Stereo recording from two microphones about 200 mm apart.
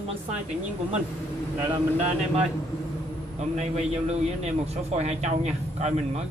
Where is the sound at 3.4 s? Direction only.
35° right (ahead or behind).